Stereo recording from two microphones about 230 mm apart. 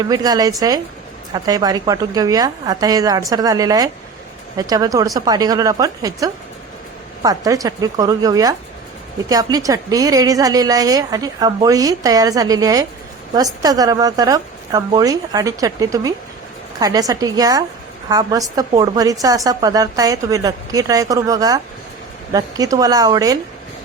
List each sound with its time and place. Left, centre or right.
0.0 s a woman's voice: centre